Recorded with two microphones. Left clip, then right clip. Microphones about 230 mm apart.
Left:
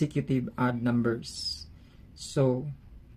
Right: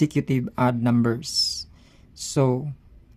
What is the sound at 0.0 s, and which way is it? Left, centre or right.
Speech, right.